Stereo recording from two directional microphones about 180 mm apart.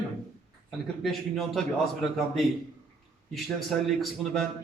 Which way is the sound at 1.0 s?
Centre (ahead or behind).